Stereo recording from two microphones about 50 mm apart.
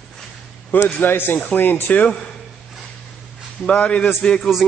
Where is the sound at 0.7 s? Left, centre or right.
Left.